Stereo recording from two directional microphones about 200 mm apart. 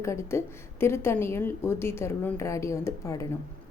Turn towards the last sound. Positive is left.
turn(degrees=15)  # may be behind; listen again after turning